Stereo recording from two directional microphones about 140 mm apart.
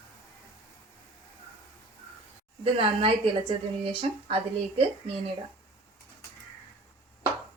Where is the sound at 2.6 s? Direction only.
40° right (ahead or behind).